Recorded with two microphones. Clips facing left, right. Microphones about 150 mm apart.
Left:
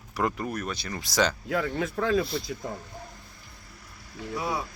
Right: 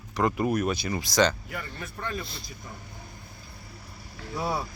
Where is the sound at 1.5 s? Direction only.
85° left.